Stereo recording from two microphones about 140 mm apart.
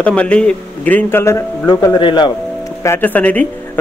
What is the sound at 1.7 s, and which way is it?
Speech, 30° left (ahead or behind).